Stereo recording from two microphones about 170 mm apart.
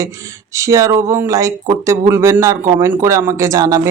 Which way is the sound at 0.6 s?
20° right (ahead or behind).